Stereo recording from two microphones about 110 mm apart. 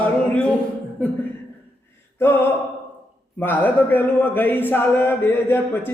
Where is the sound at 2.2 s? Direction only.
20° left (ahead or behind).